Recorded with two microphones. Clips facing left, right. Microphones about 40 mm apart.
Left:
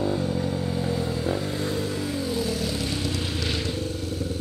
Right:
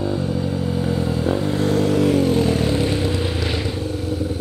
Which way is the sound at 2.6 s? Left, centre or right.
Right.